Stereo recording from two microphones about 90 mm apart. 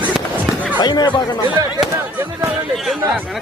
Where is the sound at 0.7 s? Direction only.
55° left (ahead or behind).